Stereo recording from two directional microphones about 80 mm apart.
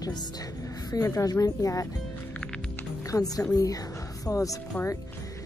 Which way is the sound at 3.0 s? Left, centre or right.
Left.